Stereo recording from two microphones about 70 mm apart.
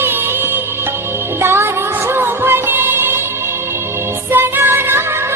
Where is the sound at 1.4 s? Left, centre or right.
Right.